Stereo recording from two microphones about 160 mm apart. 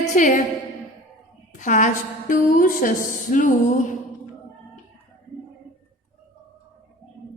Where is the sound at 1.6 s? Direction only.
55° left (ahead or behind).